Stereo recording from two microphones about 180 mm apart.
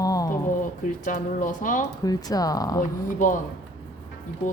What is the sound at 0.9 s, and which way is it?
Speech, 45° left (ahead or behind).